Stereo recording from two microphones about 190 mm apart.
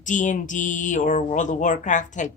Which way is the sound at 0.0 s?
40° left (ahead or behind).